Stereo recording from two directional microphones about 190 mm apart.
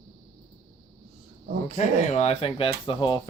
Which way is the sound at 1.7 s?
35° left (ahead or behind).